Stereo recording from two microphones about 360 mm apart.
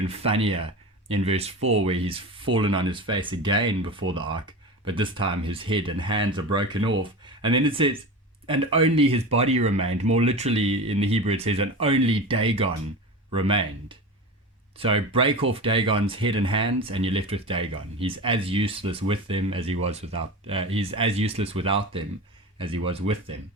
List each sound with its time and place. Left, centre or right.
0.1 s speech: centre